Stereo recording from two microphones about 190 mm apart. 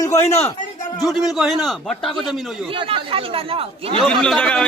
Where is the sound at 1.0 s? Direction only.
Centre (ahead or behind).